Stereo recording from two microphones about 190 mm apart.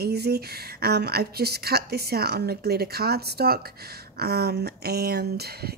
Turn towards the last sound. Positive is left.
turn(degrees=-55)  # may be behind; listen again after turning